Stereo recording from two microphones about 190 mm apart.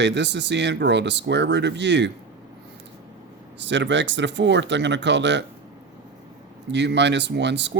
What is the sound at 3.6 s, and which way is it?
Speech, 70° right (ahead or behind).